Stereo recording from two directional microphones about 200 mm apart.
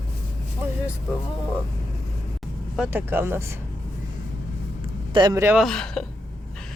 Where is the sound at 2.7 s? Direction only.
10° right (ahead or behind).